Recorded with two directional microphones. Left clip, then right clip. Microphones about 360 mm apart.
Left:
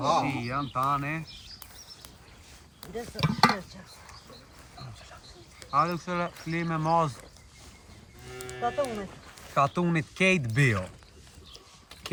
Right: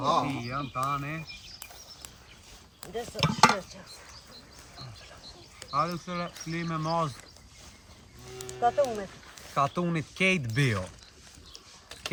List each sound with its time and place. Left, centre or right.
0.0 s speech: centre
2.8 s speech: right
5.7 s speech: centre
8.6 s speech: right
9.6 s speech: centre